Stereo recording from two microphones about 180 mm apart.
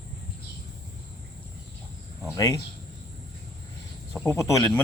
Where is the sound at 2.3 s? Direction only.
20° left (ahead or behind).